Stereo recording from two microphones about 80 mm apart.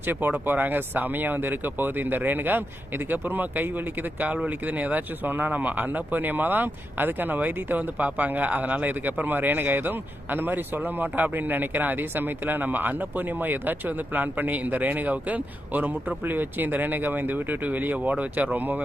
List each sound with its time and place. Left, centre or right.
0.1 s speech: right